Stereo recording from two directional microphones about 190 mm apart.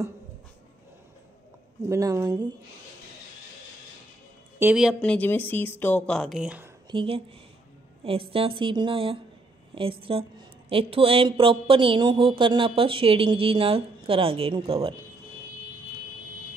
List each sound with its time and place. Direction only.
1.9 s speech: 15° right (ahead or behind)
4.6 s speech: 5° right (ahead or behind)
6.9 s speech: 30° right (ahead or behind)